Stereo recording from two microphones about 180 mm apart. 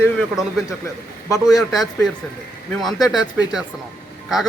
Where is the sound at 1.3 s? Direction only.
20° left (ahead or behind).